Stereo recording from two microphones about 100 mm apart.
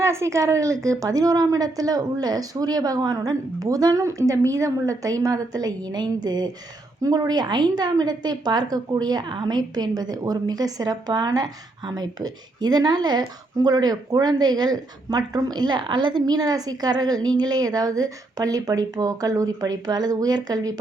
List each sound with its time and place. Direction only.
0.0 s a woman's voice: 30° right (ahead or behind)